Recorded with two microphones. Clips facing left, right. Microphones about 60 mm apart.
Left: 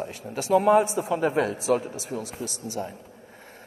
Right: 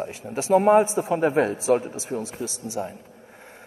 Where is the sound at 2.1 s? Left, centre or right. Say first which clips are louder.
Right 4 dB; right.